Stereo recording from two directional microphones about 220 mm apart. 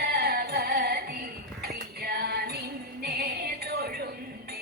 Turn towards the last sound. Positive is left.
turn(degrees=-45)  # may be behind; listen again after turning